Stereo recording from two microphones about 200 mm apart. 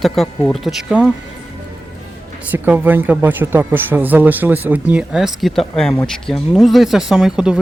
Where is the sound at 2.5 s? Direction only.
10° right (ahead or behind).